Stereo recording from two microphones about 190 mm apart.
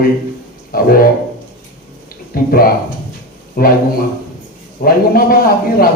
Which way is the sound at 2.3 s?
50° left (ahead or behind).